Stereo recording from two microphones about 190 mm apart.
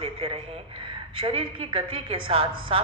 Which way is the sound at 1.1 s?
30° right (ahead or behind).